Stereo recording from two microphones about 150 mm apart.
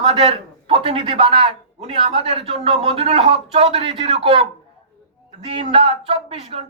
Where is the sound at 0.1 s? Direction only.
40° right (ahead or behind).